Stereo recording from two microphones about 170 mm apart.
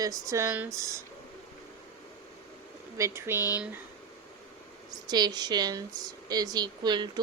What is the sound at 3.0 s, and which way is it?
Speech, 15° right (ahead or behind).